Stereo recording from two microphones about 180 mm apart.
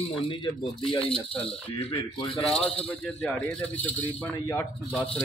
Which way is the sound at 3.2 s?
5° left (ahead or behind).